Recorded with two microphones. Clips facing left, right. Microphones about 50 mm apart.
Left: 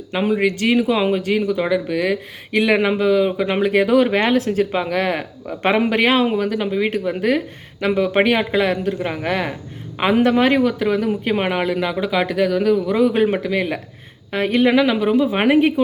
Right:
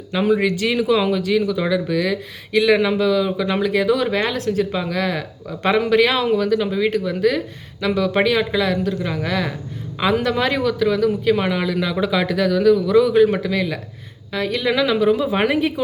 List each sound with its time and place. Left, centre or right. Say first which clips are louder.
0.4 s speech: left 2 dB; left
13.3 s speech: left 1 dB; centre
14.3 s speech: left 4 dB; left
14.8 s speech: left 1 dB; centre